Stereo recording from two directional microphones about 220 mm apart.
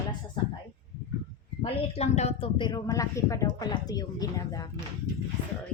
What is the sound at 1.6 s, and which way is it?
Speech, 30° left (ahead or behind).